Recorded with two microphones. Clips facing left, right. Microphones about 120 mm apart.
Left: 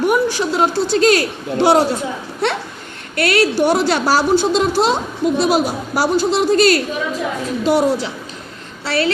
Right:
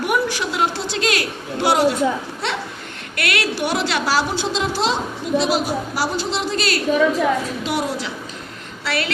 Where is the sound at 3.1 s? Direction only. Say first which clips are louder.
Left 8 dB; 35° left (ahead or behind).